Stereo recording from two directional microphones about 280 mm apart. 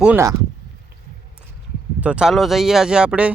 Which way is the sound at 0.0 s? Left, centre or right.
Centre.